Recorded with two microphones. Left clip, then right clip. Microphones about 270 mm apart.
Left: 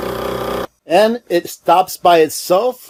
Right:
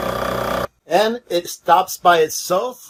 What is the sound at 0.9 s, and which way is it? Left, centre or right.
Speech, left.